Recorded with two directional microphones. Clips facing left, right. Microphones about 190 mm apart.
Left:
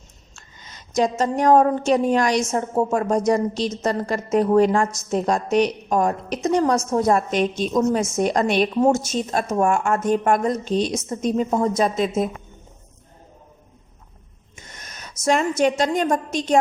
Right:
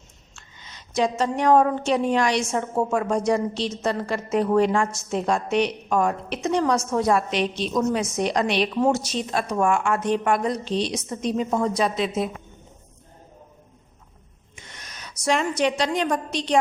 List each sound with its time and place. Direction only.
0.3 s a woman's voice: 45° left (ahead or behind)
14.5 s a sound: 45° left (ahead or behind)
15.8 s a woman's voice: 45° left (ahead or behind)